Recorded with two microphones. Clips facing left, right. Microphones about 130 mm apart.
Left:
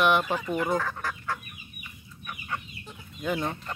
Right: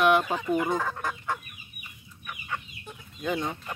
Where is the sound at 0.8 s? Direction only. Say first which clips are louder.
Right 1 dB; 20° right (ahead or behind).